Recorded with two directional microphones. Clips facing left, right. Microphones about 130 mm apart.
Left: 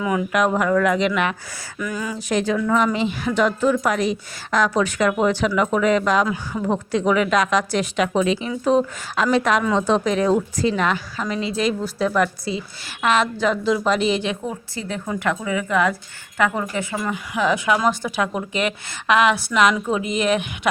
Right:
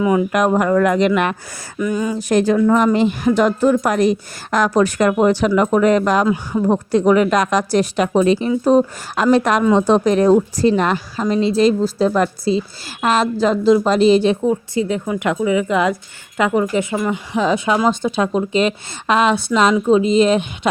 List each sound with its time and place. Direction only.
0.0 s a woman's voice: 25° right (ahead or behind)
0.3 s speech: 45° right (ahead or behind)
1.8 s a woman's voice: 25° right (ahead or behind)
2.1 s a woman's voice: 45° right (ahead or behind)
14.4 s a woman's voice: 20° right (ahead or behind)